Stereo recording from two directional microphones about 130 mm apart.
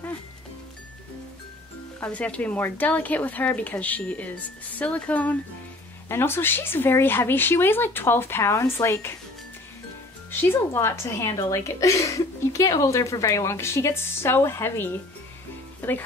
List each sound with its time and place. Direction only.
2.0 s speech: 10° left (ahead or behind)
10.3 s a woman's voice: 15° left (ahead or behind)